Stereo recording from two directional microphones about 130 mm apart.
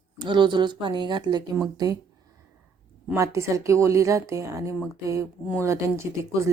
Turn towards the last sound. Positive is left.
turn(degrees=-20)  # may be behind; listen again after turning